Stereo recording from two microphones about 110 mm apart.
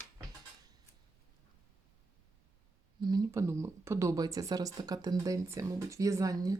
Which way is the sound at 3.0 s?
35° right (ahead or behind).